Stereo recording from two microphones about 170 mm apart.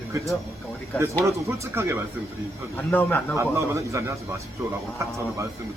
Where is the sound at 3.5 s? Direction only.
15° right (ahead or behind).